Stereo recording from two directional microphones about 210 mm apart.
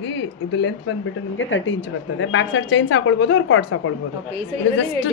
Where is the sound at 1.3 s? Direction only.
65° left (ahead or behind).